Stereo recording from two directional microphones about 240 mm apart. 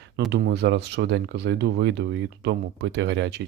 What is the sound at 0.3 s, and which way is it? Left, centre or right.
Speech, right.